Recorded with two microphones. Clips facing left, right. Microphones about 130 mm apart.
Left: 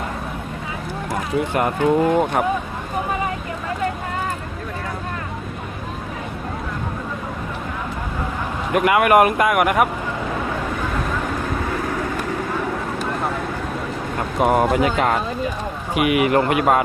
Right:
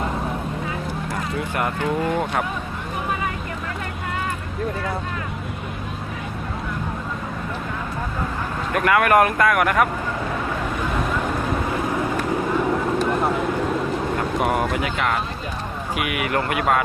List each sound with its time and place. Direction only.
1.8 s speech: 20° left (ahead or behind)
8.7 s speech: 15° left (ahead or behind)
14.4 s speech: 30° left (ahead or behind)
16.0 s speech: 25° left (ahead or behind)